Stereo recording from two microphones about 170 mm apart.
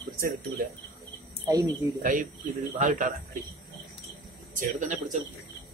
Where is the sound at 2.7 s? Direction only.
50° right (ahead or behind).